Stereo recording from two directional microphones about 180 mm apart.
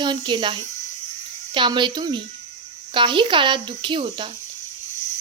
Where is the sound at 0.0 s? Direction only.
25° right (ahead or behind).